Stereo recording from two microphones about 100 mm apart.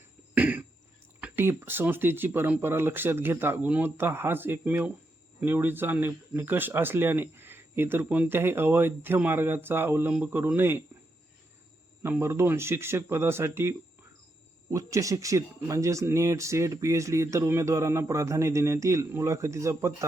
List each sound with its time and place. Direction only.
0.3 s cough: 15° right (ahead or behind)
1.4 s speech: 20° right (ahead or behind)
12.0 s speech: 25° right (ahead or behind)